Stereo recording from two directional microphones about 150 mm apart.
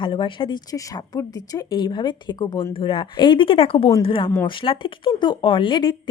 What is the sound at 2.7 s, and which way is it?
A woman's voice, 35° left (ahead or behind).